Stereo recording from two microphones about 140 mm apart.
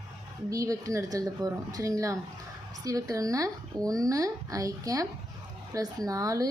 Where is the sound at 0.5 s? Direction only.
25° right (ahead or behind).